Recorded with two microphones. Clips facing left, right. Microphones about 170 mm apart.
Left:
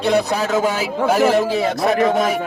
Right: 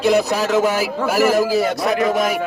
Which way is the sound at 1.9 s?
30° left (ahead or behind).